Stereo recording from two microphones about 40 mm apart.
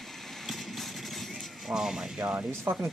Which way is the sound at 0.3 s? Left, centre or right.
Centre.